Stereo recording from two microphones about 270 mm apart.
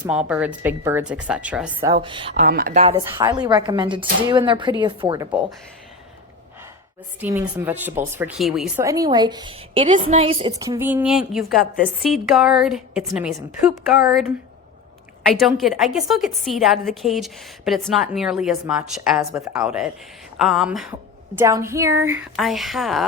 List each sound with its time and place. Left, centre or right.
0.0 s a woman's voice: centre; by 2.9 s right
2.9 s speech: centre
7.2 s a woman's voice: centre
15.4 s a woman's voice: centre